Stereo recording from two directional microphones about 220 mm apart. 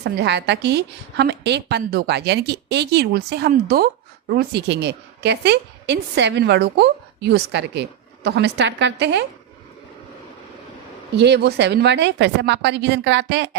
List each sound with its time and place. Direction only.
0.0 s a woman's voice: 50° right (ahead or behind)
11.2 s a woman's voice: 50° right (ahead or behind)